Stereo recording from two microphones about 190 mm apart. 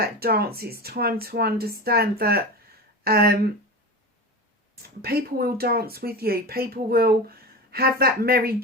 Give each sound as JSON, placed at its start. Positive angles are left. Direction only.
{"t": 0.0, "sound": "speech", "side_deg": -55}
{"t": 4.8, "sound": "speech", "side_deg": -55}